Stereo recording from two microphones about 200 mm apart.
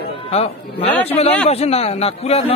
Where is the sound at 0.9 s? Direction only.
10° left (ahead or behind).